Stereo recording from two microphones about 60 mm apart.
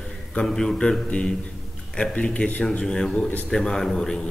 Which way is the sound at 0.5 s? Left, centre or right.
Centre.